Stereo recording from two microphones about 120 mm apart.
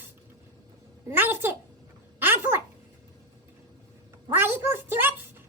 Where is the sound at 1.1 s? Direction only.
20° right (ahead or behind).